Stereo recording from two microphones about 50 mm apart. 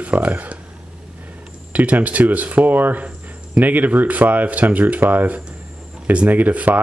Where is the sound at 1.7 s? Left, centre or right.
Right.